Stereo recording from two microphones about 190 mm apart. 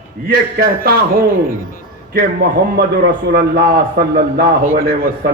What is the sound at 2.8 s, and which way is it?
A man's voice, 55° right (ahead or behind).